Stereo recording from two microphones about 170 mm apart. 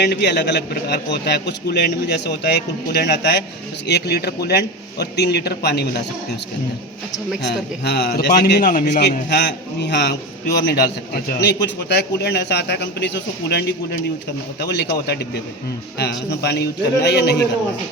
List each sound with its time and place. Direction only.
0.0 s a man's voice: 85° left
7.4 s a man's voice: 75° left (ahead or behind)
8.6 s a man's voice: 55° left (ahead or behind)
9.3 s a man's voice: 80° left
14.6 s a man's voice: 90° left